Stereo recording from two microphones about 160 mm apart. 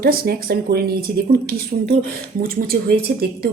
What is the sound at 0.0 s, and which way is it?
Speech, 65° right (ahead or behind).